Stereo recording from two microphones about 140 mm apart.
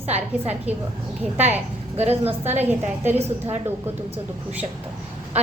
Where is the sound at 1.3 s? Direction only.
15° right (ahead or behind).